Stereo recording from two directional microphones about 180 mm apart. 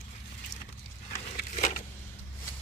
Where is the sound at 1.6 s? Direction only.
40° left (ahead or behind).